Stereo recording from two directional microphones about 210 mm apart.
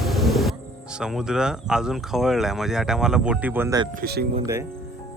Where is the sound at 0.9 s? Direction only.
5° right (ahead or behind).